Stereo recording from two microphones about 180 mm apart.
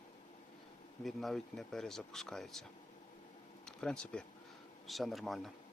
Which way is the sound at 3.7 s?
5° left (ahead or behind).